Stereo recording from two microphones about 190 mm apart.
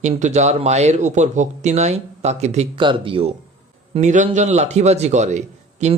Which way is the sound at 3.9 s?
40° right (ahead or behind).